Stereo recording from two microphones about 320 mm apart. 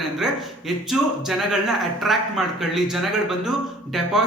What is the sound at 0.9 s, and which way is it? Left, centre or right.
Speech, centre.